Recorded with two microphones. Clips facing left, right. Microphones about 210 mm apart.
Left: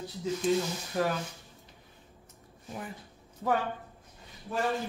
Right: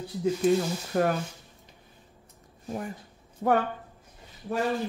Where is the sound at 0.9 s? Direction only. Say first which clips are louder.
Right 5 dB; 55° right (ahead or behind).